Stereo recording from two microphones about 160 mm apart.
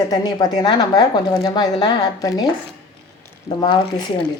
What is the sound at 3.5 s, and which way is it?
Speech, 30° left (ahead or behind).